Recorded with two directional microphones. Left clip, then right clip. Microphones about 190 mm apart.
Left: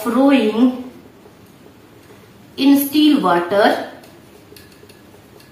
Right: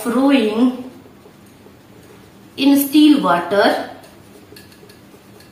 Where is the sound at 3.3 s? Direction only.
15° left (ahead or behind).